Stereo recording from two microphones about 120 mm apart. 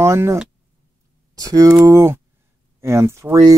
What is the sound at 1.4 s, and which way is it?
Speech, 30° right (ahead or behind).